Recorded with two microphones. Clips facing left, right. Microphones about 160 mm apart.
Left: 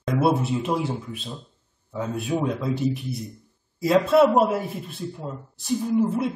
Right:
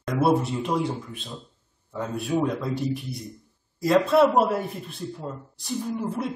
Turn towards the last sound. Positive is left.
turn(degrees=0)  # may be behind; listen again after turning